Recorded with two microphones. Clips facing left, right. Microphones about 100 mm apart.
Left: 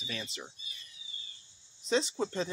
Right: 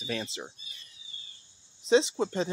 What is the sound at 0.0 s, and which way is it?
Speech, 50° right (ahead or behind).